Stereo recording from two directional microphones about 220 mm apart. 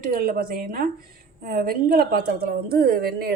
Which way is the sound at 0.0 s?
40° right (ahead or behind).